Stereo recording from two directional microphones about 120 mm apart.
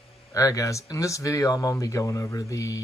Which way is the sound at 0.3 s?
25° left (ahead or behind).